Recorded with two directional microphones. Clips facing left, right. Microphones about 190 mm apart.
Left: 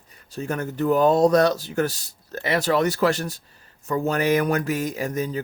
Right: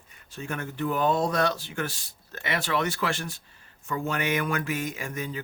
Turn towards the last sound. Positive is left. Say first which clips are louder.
# left 7 dB
turn(degrees=40)  # may be behind; listen again after turning